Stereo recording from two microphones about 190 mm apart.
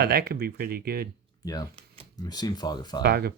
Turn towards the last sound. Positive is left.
turn(degrees=-55)  # may be behind; listen again after turning